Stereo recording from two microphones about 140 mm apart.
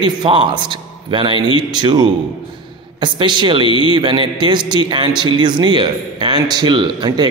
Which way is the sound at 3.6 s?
35° left (ahead or behind).